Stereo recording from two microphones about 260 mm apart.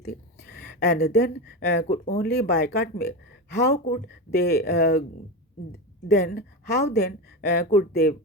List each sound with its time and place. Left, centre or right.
0.0 s speech: left